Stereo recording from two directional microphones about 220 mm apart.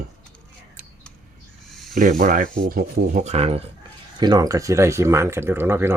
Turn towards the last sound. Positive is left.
turn(degrees=-10)  # may be behind; listen again after turning